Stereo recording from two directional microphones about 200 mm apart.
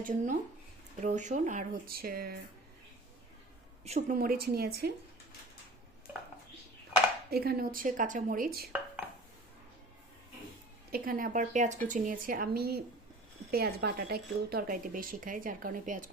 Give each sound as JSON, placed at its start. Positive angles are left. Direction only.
{"t": 0.0, "sound": "speech", "side_deg": -40}
{"t": 3.8, "sound": "speech", "side_deg": -30}
{"t": 4.2, "sound": "a woman's voice", "side_deg": -50}
{"t": 7.3, "sound": "a woman's voice", "side_deg": -50}
{"t": 10.9, "sound": "a woman's voice", "side_deg": -45}